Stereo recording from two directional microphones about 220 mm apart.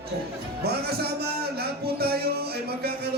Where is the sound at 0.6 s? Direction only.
45° right (ahead or behind).